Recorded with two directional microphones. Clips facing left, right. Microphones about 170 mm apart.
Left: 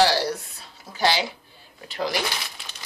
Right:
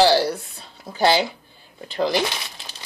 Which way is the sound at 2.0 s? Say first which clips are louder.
Right 5 dB; 30° right (ahead or behind).